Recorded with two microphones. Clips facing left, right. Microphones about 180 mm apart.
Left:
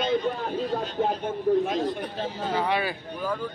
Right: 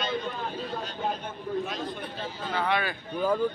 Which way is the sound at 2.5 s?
10° left (ahead or behind).